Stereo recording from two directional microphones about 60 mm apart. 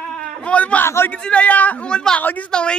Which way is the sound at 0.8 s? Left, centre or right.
Left.